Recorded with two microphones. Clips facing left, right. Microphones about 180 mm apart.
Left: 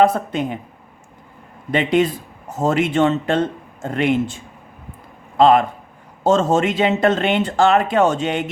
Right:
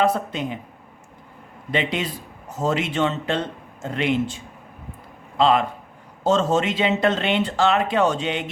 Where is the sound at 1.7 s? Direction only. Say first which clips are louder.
Left 8 dB; 50° left (ahead or behind).